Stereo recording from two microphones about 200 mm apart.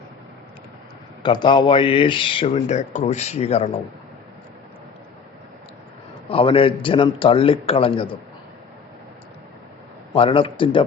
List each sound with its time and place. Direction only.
1.2 s speech: 25° left (ahead or behind)
6.2 s speech: 25° left (ahead or behind)
10.2 s speech: 25° left (ahead or behind)